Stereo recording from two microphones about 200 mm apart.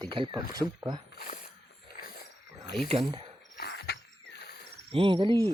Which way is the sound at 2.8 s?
30° right (ahead or behind).